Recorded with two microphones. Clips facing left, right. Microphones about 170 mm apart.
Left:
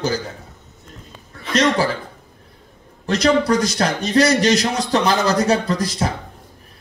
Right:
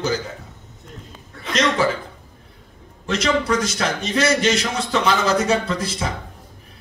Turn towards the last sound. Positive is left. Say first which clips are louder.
# left 3 dB
turn(degrees=40)  # may be behind; listen again after turning